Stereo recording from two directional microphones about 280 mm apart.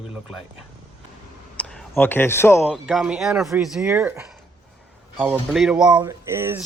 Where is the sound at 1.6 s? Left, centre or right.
Centre.